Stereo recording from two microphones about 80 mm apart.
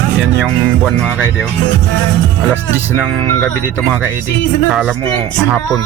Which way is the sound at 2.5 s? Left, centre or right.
Right.